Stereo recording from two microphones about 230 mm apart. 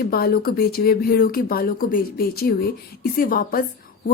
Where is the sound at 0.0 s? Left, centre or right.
Left.